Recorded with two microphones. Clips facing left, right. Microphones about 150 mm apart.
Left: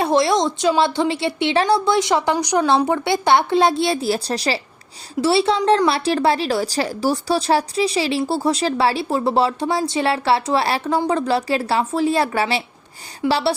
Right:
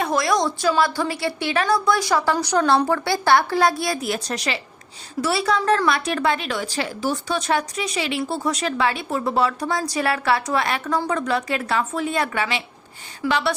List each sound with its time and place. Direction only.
0.0 s a woman's voice: 30° left (ahead or behind)